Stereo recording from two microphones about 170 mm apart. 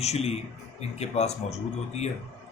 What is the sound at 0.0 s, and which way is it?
Speech, 40° left (ahead or behind).